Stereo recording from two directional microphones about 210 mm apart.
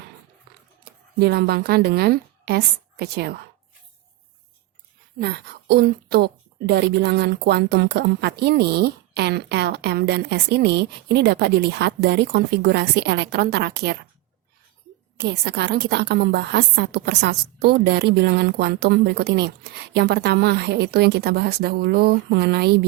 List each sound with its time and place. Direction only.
0.9 s a woman's voice: 50° right (ahead or behind)
5.2 s a woman's voice: 55° right (ahead or behind)
15.2 s a woman's voice: 55° right (ahead or behind)